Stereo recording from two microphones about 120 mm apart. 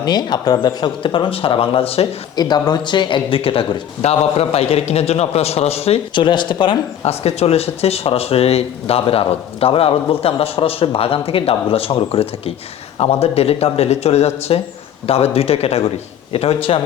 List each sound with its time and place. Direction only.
0.0 s speech: 35° left (ahead or behind); by 2.0 s 55° left (ahead or behind)
2.3 s speech: 35° left (ahead or behind); by 6.2 s 55° left (ahead or behind)
6.2 s speech: 40° left (ahead or behind)
7.0 s speech: 60° left (ahead or behind)